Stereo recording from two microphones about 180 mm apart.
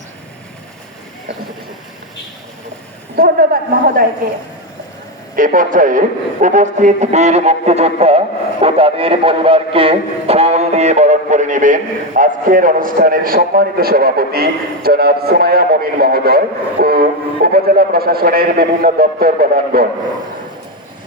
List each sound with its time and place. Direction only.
3.2 s speech: 55° right (ahead or behind)
5.4 s a man's voice: 50° right (ahead or behind)